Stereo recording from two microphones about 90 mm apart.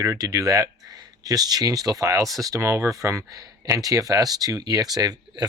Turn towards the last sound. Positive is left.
turn(degrees=-45)  # may be behind; listen again after turning